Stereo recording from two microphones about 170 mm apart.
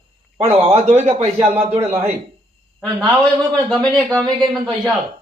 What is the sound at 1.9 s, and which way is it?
Speech, 40° right (ahead or behind).